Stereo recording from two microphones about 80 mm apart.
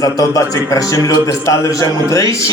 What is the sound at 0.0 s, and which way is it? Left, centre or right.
A man's voice, left.